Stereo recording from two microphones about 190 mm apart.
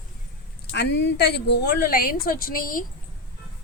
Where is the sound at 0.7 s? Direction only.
65° left (ahead or behind); by 2.9 s 45° left (ahead or behind).